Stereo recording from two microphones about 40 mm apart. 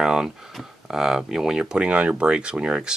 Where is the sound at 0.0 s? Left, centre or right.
Centre.